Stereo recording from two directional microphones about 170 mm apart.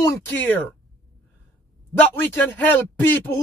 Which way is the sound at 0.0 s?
10° left (ahead or behind).